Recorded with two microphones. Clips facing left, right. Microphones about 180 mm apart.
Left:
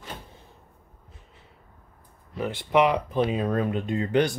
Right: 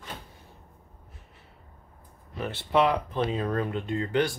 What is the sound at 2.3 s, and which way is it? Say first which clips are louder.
Speech: left 3 dB; 15° left (ahead or behind).